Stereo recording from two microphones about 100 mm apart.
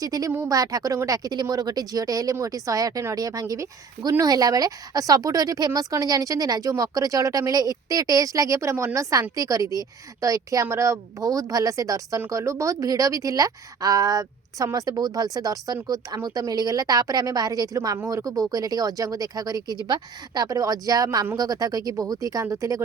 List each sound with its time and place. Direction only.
0.0 s a woman's voice: 35° right (ahead or behind)